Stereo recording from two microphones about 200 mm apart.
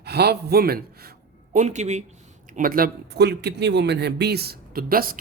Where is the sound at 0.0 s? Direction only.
55° right (ahead or behind).